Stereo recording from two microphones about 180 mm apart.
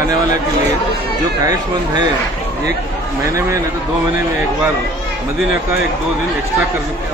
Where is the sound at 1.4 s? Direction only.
20° right (ahead or behind).